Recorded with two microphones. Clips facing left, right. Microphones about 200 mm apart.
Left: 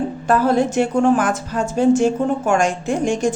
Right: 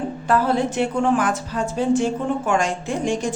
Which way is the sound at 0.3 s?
45° left (ahead or behind).